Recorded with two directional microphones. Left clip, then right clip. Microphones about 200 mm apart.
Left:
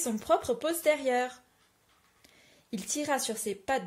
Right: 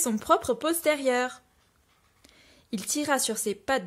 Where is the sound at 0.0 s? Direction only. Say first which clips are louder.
Right 4 dB; 35° right (ahead or behind).